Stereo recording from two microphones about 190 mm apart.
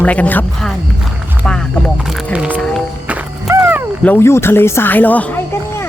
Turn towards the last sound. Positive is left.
turn(degrees=10)  # may be behind; listen again after turning